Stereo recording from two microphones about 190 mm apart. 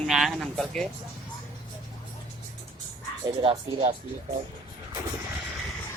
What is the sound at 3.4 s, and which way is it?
Speech, 30° right (ahead or behind).